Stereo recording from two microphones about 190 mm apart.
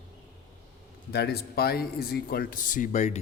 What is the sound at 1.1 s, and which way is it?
Speech, 60° left (ahead or behind).